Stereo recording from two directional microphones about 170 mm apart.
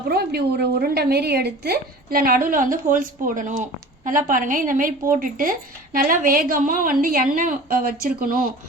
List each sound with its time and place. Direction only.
0.1 s a woman's voice: 70° right (ahead or behind)